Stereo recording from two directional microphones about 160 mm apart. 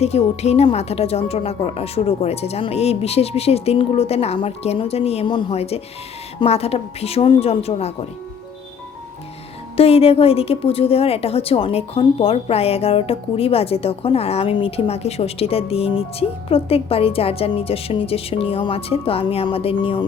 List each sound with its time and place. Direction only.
0.0 s a woman's voice: 40° left (ahead or behind)
9.7 s a woman's voice: 40° left (ahead or behind)